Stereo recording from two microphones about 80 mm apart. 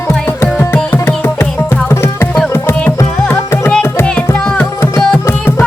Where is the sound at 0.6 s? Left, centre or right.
Left.